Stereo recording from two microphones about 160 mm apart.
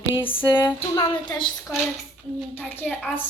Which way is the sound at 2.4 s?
10° left (ahead or behind).